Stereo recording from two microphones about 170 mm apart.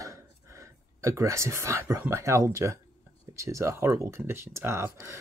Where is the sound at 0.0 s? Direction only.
20° right (ahead or behind).